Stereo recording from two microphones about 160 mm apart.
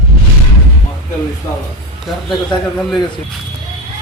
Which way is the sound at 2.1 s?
Centre (ahead or behind).